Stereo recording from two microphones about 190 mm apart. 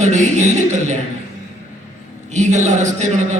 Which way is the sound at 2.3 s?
40° right (ahead or behind).